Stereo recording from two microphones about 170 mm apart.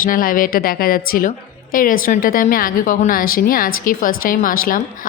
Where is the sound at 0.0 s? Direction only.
55° left (ahead or behind).